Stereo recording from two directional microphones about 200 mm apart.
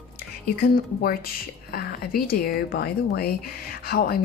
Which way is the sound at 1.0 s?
50° left (ahead or behind).